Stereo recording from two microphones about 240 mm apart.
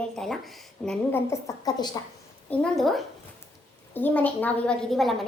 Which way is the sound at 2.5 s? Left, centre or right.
Centre.